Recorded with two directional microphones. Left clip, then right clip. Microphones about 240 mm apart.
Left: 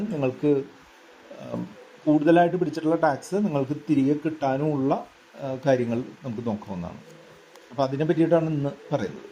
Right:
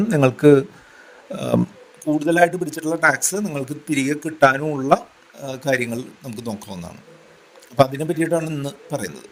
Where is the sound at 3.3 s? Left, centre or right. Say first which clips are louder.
Even; right.